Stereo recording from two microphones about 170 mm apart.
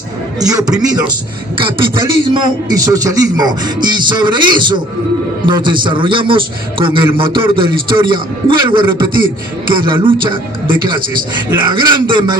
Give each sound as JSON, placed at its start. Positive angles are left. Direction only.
{"t": 0.3, "sound": "a man's voice", "side_deg": -20}
{"t": 11.7, "sound": "a man's voice", "side_deg": -25}